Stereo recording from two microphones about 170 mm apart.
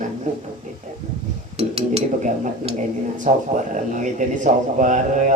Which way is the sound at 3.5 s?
45° right (ahead or behind).